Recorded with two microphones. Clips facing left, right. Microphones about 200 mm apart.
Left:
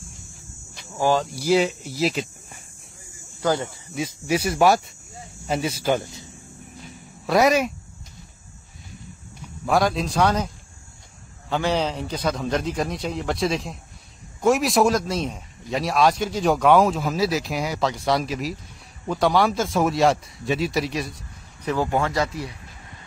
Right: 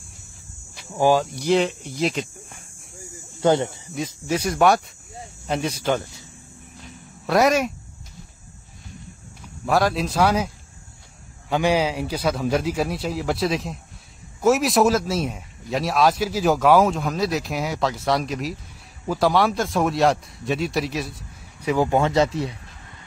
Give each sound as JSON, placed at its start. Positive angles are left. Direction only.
{"t": 0.9, "sound": "a man's voice", "side_deg": -15}
{"t": 1.2, "sound": "speech", "side_deg": 5}
{"t": 3.3, "sound": "speech", "side_deg": -25}
{"t": 3.9, "sound": "speech", "side_deg": 5}
{"t": 6.8, "sound": "a sound", "side_deg": 0}
{"t": 9.7, "sound": "a man's voice", "side_deg": 0}
{"t": 21.6, "sound": "speech", "side_deg": -15}